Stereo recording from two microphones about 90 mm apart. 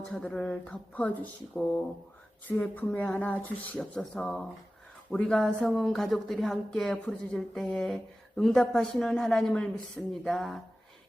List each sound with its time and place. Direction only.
0.1 s speech: 10° left (ahead or behind)